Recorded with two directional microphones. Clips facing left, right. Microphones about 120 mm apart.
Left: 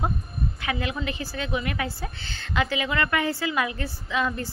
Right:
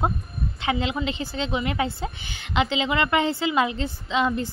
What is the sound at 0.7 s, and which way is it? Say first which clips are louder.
Speech: right 5 dB; 20° right (ahead or behind).